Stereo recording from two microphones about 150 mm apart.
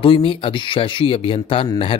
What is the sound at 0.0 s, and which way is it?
Speech, 35° left (ahead or behind).